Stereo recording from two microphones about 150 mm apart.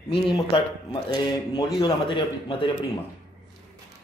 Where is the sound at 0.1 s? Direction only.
35° left (ahead or behind).